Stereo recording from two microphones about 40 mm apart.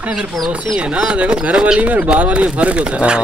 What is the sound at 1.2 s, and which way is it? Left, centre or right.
Speech, right.